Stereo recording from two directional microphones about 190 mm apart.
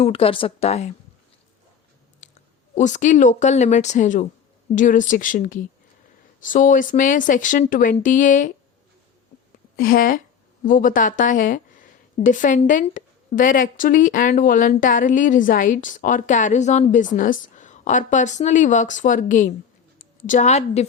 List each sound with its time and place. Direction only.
0.0 s speech: 30° left (ahead or behind)
2.2 s a sound: 40° left (ahead or behind)
2.7 s a woman's voice: 40° left (ahead or behind)
9.7 s a woman's voice: 50° left (ahead or behind); by 20.8 s 35° left (ahead or behind)